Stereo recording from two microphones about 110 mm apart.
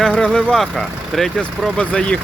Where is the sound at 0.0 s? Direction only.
5° left (ahead or behind).